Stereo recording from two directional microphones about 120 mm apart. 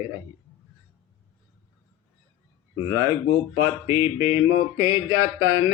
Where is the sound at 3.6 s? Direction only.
25° right (ahead or behind).